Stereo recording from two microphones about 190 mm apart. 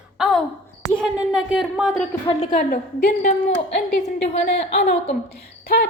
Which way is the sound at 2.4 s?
45° left (ahead or behind).